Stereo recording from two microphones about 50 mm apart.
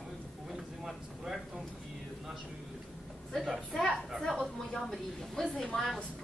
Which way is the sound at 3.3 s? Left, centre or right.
Centre.